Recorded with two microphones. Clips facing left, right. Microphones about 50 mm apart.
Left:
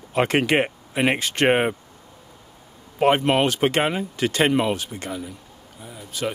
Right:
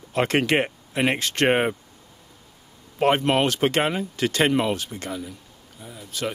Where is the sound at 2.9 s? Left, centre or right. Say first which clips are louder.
Left 2 dB; centre.